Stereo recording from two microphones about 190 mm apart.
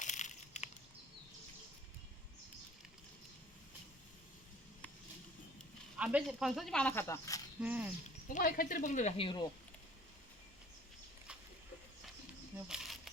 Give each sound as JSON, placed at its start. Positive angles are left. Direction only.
{"t": 0.0, "sound": "a sound", "side_deg": 40}
{"t": 6.0, "sound": "speech", "side_deg": -5}
{"t": 7.6, "sound": "speech", "side_deg": -10}
{"t": 8.3, "sound": "a woman's voice", "side_deg": 45}
{"t": 12.6, "sound": "camera", "side_deg": 0}